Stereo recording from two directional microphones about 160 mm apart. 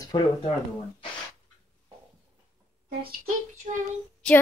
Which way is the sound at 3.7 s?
45° right (ahead or behind).